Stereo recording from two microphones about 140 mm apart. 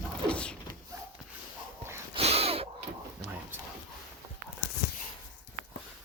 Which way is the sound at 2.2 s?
45° right (ahead or behind).